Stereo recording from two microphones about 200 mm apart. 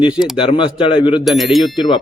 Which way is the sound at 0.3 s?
25° left (ahead or behind).